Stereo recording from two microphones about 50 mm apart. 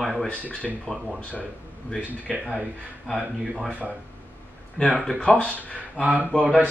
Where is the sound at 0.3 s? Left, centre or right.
Left.